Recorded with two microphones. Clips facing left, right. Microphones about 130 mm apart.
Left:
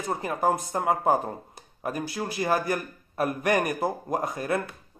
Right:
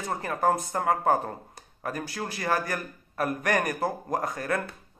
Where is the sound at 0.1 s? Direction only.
20° left (ahead or behind).